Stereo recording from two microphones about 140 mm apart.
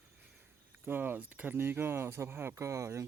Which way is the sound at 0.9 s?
15° right (ahead or behind).